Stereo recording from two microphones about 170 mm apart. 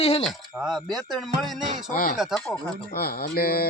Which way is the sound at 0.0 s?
35° left (ahead or behind).